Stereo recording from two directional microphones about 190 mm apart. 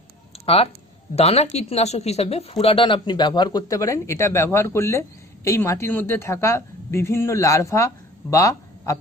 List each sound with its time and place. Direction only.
0.5 s speech: 30° left (ahead or behind)